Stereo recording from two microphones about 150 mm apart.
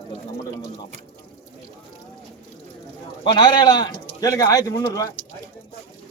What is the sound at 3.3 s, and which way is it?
Speech, 30° left (ahead or behind).